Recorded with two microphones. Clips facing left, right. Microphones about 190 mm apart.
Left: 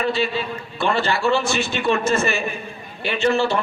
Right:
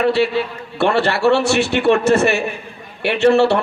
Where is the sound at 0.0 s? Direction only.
65° right (ahead or behind).